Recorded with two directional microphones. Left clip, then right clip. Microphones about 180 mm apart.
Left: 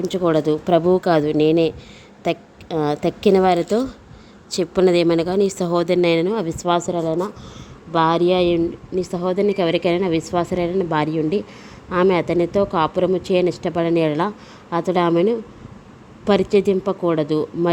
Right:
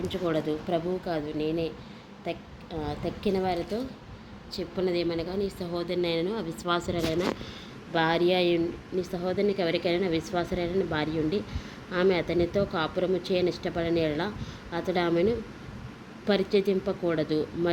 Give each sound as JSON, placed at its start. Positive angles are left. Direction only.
{"t": 0.1, "sound": "a woman's voice", "side_deg": 55}
{"t": 7.9, "sound": "a woman's voice", "side_deg": 45}